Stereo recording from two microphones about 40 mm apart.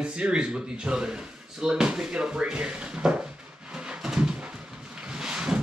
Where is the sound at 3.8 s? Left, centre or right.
Centre.